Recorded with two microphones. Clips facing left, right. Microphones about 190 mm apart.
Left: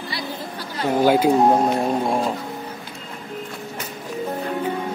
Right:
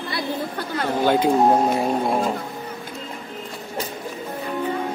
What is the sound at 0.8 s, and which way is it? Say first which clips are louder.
Speech: left 3 dB; 5° left (ahead or behind).